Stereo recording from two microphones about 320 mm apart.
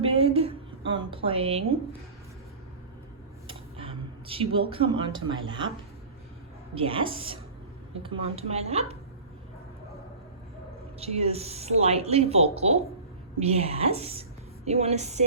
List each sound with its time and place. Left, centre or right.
0.0 s a woman's voice: centre
3.8 s a woman's voice: centre
6.7 s a woman's voice: centre
11.0 s a woman's voice: centre